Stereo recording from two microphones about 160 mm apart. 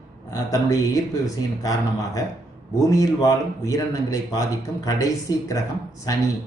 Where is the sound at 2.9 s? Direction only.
20° left (ahead or behind).